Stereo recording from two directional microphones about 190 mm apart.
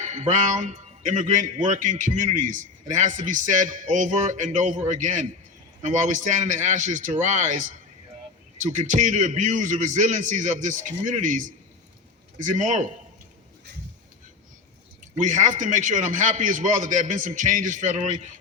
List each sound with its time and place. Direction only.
0.0 s a man's voice: 40° right (ahead or behind)
8.7 s a man's voice: 40° right (ahead or behind)
15.1 s a man's voice: 40° right (ahead or behind)